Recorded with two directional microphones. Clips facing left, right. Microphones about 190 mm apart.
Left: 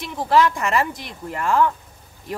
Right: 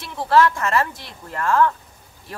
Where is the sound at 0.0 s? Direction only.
15° left (ahead or behind).